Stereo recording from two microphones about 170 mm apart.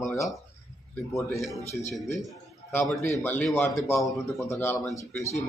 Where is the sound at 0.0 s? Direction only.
15° left (ahead or behind).